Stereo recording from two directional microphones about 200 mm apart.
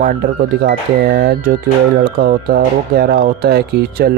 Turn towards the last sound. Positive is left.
turn(degrees=-50)  # may be behind; listen again after turning